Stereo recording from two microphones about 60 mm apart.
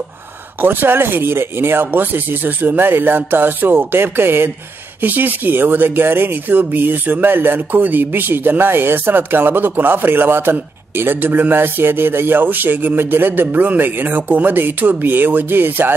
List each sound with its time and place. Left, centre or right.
0.6 s speech: right